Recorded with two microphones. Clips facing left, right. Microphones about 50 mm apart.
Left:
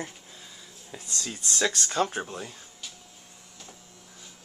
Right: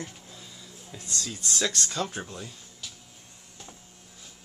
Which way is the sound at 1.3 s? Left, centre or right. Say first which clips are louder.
Left 2 dB; centre.